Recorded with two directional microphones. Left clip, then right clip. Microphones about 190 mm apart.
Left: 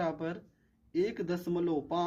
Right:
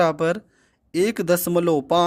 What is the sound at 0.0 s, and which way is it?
Speech, 60° right (ahead or behind).